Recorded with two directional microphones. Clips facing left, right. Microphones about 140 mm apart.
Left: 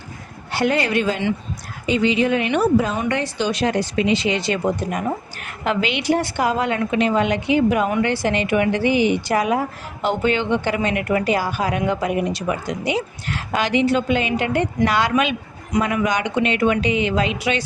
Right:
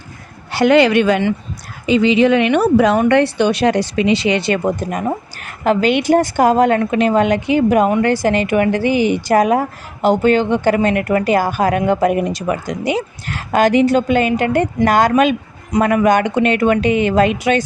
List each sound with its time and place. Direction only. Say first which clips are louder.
0.5 s speech: right 8 dB; 90° right
1.9 s speech: right 6 dB; 90° right
3.0 s a woman's voice: right 9 dB; 65° right (ahead or behind); by 17.6 s 50° right (ahead or behind)